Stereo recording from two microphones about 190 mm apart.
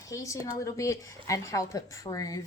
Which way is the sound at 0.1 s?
15° left (ahead or behind).